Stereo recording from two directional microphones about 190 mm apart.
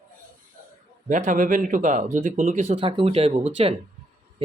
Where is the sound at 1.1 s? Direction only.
40° right (ahead or behind).